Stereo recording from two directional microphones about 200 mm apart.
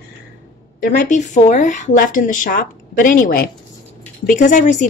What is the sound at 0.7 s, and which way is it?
Speech, 45° left (ahead or behind).